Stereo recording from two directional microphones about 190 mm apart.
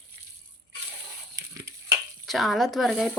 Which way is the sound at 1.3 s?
15° right (ahead or behind).